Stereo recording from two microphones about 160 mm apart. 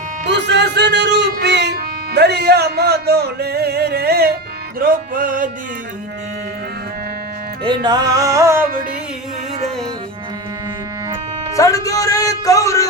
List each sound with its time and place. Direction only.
0.3 s music: 90° right
4.8 s music: 60° right (ahead or behind)
7.6 s music: 30° right (ahead or behind)
11.5 s speech: 20° left (ahead or behind)